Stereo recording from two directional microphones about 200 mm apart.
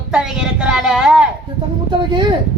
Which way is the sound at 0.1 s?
5° right (ahead or behind).